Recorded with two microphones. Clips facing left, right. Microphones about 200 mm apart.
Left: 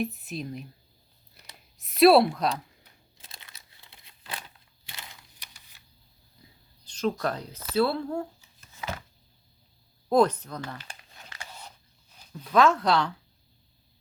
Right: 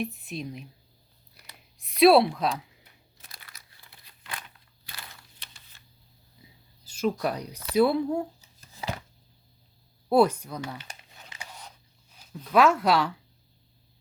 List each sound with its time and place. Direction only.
0.0 s speech: centre (ahead or behind)
1.8 s a woman's voice: centre (ahead or behind)
3.2 s crumpling: 25° left (ahead or behind)
6.4 s oink: 5° right (ahead or behind)
6.8 s speech: 10° right (ahead or behind)
8.4 s a sound: 35° right (ahead or behind)
10.1 s speech: 10° right (ahead or behind)
12.2 s speech: 5° right (ahead or behind)